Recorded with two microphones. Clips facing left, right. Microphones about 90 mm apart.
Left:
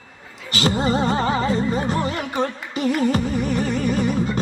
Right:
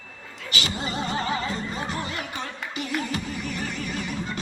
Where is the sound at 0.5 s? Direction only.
40° left (ahead or behind).